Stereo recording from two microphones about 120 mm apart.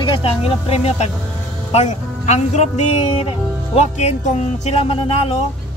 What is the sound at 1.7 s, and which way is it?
Speech, 70° left (ahead or behind).